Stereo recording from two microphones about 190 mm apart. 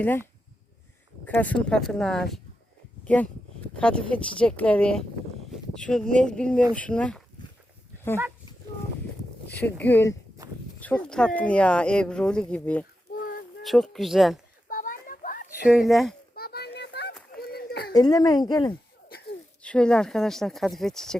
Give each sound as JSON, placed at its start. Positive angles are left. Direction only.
{"t": 0.0, "sound": "speech", "side_deg": 10}
{"t": 9.5, "sound": "speech", "side_deg": 10}
{"t": 13.1, "sound": "a sound", "side_deg": 50}
{"t": 13.6, "sound": "speech", "side_deg": 0}
{"t": 14.7, "sound": "a sound", "side_deg": 45}
{"t": 15.7, "sound": "speech", "side_deg": 0}
{"t": 16.3, "sound": "children playing", "side_deg": 55}
{"t": 17.3, "sound": "a sound", "side_deg": 55}
{"t": 17.9, "sound": "speech", "side_deg": 20}
{"t": 19.6, "sound": "speech", "side_deg": 5}